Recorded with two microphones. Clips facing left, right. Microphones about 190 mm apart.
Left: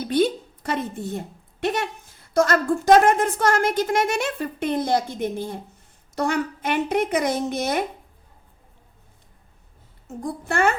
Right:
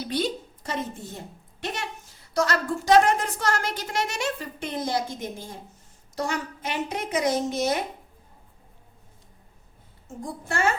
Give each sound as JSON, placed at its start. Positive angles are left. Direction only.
{"t": 0.0, "sound": "a woman's voice", "side_deg": 55}
{"t": 10.1, "sound": "a woman's voice", "side_deg": 60}